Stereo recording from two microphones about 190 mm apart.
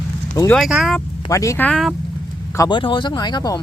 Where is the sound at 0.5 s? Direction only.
Centre (ahead or behind).